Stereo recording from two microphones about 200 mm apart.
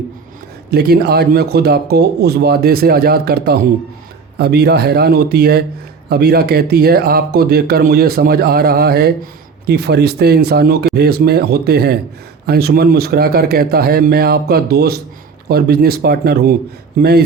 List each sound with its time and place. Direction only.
0.7 s speech: 50° right (ahead or behind)